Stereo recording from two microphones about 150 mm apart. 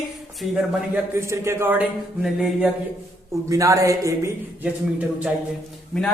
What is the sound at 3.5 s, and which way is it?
Speech, 20° right (ahead or behind).